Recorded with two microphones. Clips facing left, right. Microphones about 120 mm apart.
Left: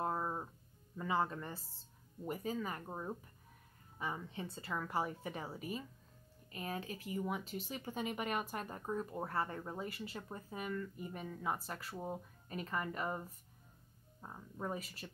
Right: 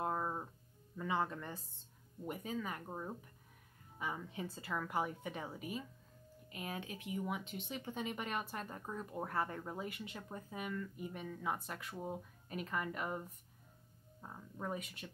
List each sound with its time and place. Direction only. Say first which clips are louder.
0.0 s music: even; 5° left (ahead or behind)
0.9 s speech: left 1 dB; centre (ahead or behind)
4.0 s speech: even; 10° right (ahead or behind)
14.2 s speech: left 1 dB; 10° left (ahead or behind)